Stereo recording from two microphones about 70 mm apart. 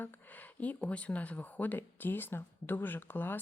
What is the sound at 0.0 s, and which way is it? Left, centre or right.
Speech, left.